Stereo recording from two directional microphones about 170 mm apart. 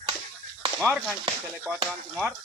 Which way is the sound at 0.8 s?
Centre (ahead or behind).